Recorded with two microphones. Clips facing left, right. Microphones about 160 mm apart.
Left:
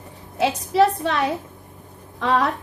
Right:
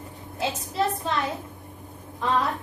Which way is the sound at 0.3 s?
75° left (ahead or behind).